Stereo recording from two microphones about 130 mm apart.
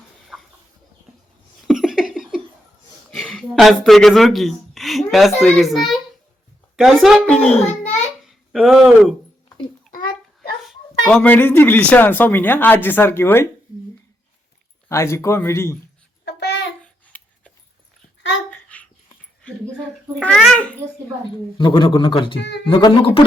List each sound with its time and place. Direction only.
0.3 s chicken: 5° right (ahead or behind)
1.6 s a sound: 5° right (ahead or behind)
3.1 s speech: 5° left (ahead or behind)
10.7 s speech: 5° left (ahead or behind)
14.8 s speech: 20° left (ahead or behind)
16.8 s babbling: 10° left (ahead or behind)
18.7 s dog: 10° left (ahead or behind)
20.2 s speech: 5° left (ahead or behind)
21.6 s speech: 35° left (ahead or behind)